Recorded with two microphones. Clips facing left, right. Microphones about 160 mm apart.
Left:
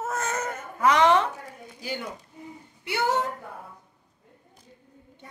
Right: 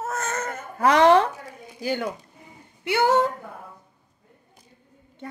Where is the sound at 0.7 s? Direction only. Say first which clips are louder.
Right 4 dB; 40° right (ahead or behind).